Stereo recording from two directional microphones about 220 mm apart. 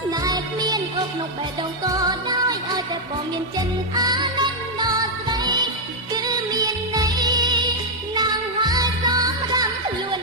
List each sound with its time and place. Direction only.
0.1 s music: 15° right (ahead or behind)
1.8 s music: 15° right (ahead or behind)
3.9 s music: 20° right (ahead or behind)